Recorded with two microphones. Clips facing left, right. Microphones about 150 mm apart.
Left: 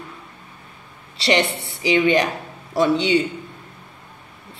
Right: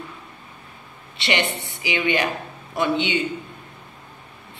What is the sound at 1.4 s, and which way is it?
Speech, 70° left (ahead or behind).